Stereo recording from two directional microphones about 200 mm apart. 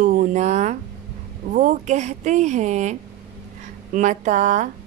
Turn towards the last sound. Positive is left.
turn(degrees=-40)  # may be behind; listen again after turning